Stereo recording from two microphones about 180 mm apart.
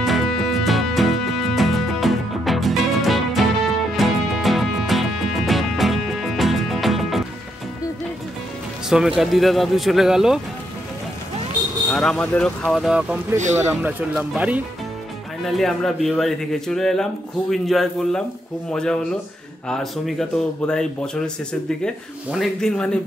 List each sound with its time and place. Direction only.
0.0 s music: centre (ahead or behind)
8.8 s speech: 5° right (ahead or behind)
11.9 s speech: 5° left (ahead or behind)
13.4 s speech: 40° right (ahead or behind)
13.7 s speech: 10° right (ahead or behind)